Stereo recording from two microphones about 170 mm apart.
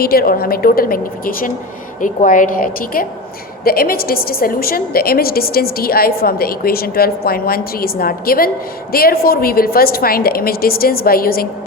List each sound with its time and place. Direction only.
0.0 s a woman's voice: 60° left (ahead or behind)